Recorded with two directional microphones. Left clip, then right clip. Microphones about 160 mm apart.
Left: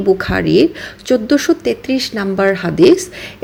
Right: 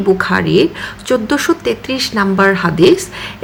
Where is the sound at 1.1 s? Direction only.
20° left (ahead or behind).